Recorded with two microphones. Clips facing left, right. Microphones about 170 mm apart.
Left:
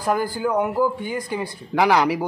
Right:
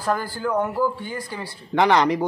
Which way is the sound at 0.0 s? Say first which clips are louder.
Left 3 dB; 15° left (ahead or behind).